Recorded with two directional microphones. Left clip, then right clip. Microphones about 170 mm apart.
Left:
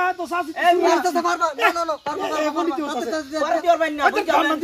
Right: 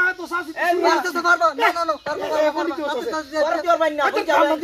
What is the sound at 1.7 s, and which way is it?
Speech, centre (ahead or behind).